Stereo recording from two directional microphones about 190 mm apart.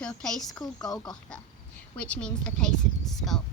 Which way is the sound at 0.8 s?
20° left (ahead or behind).